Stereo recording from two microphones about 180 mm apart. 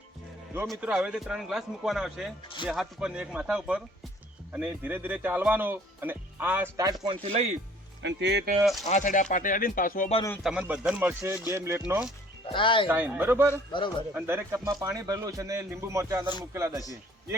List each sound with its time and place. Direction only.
0.7 s a man's voice: 5° right (ahead or behind)
7.0 s speech: 30° right (ahead or behind)
8.0 s speech: 70° right (ahead or behind)
8.8 s speech: 45° left (ahead or behind)
10.4 s speech: 5° right (ahead or behind)
12.5 s speech: 30° left (ahead or behind)
12.9 s speech: 10° right (ahead or behind)